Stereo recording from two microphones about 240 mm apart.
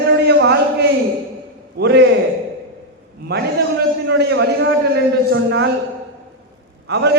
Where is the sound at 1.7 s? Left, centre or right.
Right.